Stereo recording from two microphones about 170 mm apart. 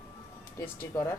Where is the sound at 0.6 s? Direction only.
20° left (ahead or behind).